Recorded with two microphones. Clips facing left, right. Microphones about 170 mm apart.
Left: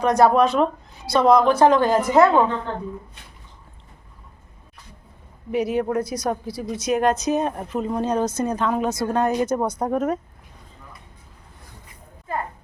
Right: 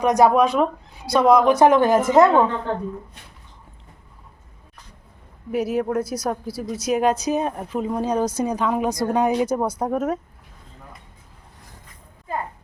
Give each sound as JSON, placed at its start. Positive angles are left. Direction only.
{"t": 0.0, "sound": "a woman's voice", "side_deg": -15}
{"t": 5.5, "sound": "speech", "side_deg": -5}